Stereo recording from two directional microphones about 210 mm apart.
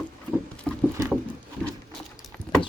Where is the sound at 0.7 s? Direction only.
5° left (ahead or behind).